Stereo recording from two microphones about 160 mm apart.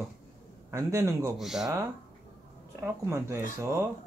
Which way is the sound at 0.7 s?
15° right (ahead or behind).